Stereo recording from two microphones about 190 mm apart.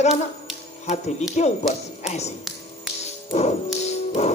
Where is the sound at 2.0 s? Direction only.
35° left (ahead or behind).